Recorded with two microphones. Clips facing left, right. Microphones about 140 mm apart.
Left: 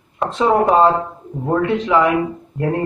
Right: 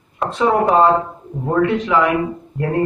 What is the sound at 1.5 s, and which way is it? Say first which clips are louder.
Speech: even; 20° left (ahead or behind).